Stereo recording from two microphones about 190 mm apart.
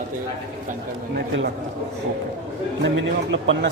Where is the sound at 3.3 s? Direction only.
80° right.